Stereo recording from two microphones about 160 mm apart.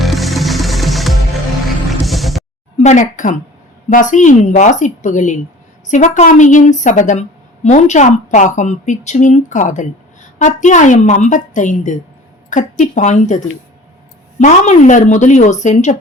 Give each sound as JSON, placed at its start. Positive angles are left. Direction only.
{"t": 0.0, "sound": "music", "side_deg": 0}
{"t": 1.9, "sound": "a sound", "side_deg": 0}
{"t": 2.7, "sound": "a woman's voice", "side_deg": 45}